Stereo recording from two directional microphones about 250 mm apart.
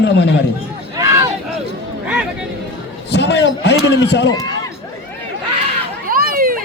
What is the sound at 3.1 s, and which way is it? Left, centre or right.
A man's voice, left.